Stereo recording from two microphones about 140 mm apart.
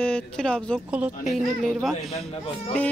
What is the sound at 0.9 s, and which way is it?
Speech, 5° right (ahead or behind).